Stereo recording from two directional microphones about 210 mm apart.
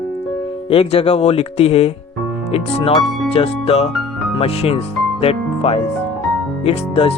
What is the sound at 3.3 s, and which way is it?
Speech, 30° left (ahead or behind).